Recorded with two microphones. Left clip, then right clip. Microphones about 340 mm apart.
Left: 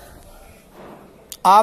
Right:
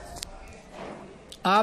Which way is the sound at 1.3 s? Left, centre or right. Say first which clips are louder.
Left 10 dB; centre.